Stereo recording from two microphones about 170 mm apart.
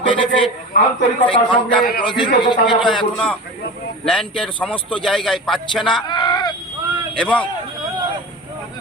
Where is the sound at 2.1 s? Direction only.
25° left (ahead or behind).